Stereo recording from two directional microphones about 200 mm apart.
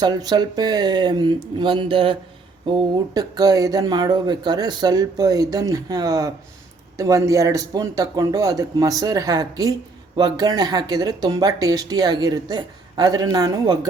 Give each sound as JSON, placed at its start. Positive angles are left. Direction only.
{"t": 0.0, "sound": "speech", "side_deg": -20}